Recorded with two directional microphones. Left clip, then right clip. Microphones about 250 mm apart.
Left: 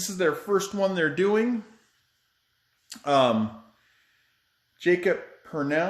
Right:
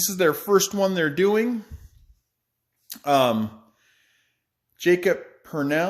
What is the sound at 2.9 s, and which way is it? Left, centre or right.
Speech, right.